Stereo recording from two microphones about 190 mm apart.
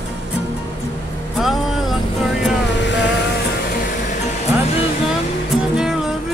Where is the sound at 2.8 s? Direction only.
70° left (ahead or behind).